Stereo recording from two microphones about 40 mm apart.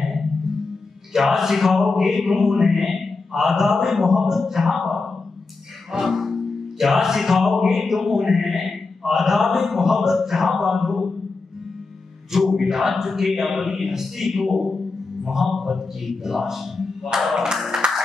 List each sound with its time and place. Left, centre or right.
0.0 s music: centre
12.3 s music: centre
17.2 s speech: centre
17.8 s music: right